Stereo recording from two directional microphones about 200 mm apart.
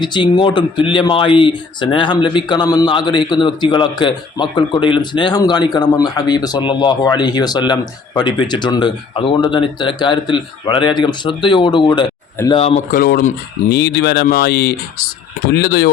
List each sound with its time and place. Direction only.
0.0 s a man's voice: 25° left (ahead or behind)
12.9 s speech: 45° left (ahead or behind)